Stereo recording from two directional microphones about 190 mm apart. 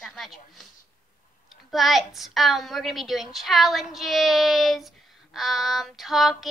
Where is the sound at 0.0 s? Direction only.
Centre (ahead or behind).